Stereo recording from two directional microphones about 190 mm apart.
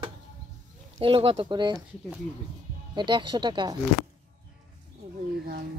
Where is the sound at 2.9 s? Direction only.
25° right (ahead or behind).